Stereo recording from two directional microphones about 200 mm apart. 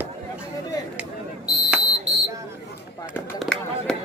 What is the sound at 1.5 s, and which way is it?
Smoke detector, 20° left (ahead or behind).